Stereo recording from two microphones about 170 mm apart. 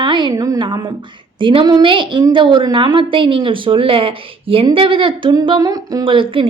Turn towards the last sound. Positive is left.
turn(degrees=-30)  # may be behind; listen again after turning